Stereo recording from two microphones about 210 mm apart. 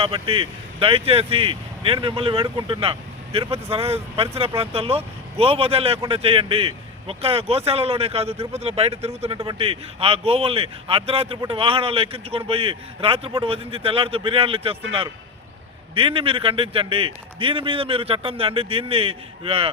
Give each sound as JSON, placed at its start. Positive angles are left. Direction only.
{"t": 0.0, "sound": "a man's voice", "side_deg": -25}
{"t": 16.0, "sound": "a man's voice", "side_deg": -25}